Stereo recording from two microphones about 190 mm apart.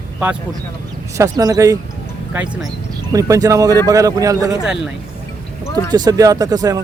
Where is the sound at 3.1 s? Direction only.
15° right (ahead or behind).